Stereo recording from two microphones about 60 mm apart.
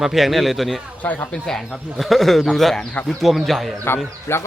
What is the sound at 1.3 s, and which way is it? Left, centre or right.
Speech, centre.